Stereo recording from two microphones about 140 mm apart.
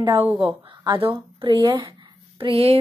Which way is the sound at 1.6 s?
35° right (ahead or behind).